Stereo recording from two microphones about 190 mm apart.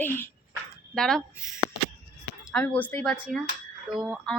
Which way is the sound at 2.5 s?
5° left (ahead or behind).